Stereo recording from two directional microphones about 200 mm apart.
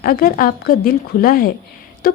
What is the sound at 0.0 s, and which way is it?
A woman's voice, 45° left (ahead or behind).